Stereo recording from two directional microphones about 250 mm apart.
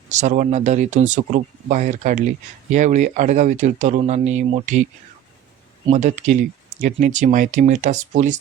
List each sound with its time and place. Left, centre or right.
0.1 s speech: right